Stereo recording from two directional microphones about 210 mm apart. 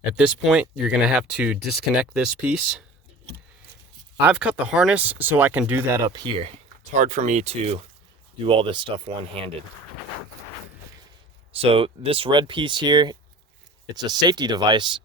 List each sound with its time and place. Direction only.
0.2 s speech: 5° right (ahead or behind)
4.2 s speech: 5° right (ahead or behind); by 6.5 s 25° right (ahead or behind)
6.9 s speech: 35° right (ahead or behind)
11.5 s speech: 30° right (ahead or behind)